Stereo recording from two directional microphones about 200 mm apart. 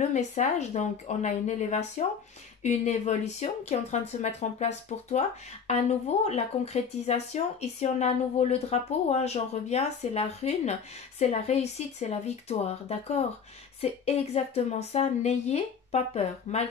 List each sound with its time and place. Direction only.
0.0 s speech: 35° left (ahead or behind)